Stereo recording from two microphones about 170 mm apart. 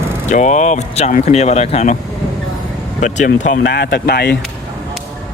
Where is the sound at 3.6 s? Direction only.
80° left.